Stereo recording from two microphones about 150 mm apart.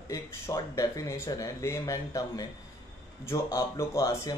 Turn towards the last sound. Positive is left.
turn(degrees=20)  # may be behind; listen again after turning